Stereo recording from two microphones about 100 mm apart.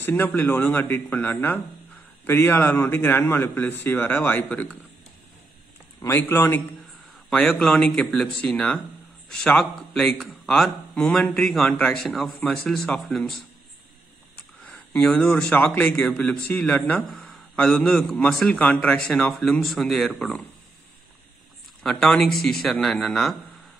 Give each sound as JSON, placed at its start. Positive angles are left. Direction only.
{"t": 0.0, "sound": "a man's voice", "side_deg": 20}
{"t": 5.9, "sound": "a man's voice", "side_deg": 25}
{"t": 7.2, "sound": "a man's voice", "side_deg": 5}
{"t": 14.7, "sound": "a man's voice", "side_deg": 15}
{"t": 21.8, "sound": "a man's voice", "side_deg": 5}